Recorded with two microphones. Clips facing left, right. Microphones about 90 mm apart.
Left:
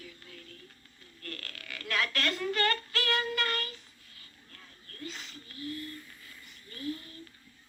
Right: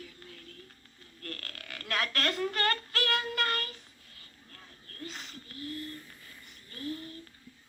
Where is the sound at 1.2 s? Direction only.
40° right (ahead or behind).